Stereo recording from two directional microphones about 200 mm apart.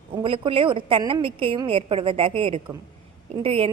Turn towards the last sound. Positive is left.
turn(degrees=-30)  # may be behind; listen again after turning